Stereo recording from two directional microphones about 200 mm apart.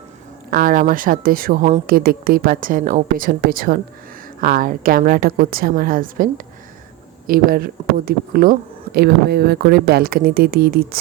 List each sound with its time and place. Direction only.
0.5 s speech: 40° right (ahead or behind)